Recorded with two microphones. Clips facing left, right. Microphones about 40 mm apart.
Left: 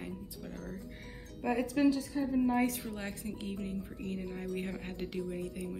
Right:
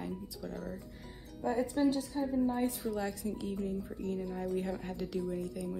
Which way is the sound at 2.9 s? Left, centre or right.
Left.